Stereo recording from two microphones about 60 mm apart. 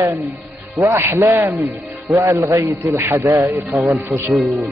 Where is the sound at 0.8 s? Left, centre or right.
Right.